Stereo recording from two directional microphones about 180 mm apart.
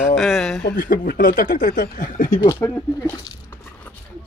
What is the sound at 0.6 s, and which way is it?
Speech, 50° left (ahead or behind).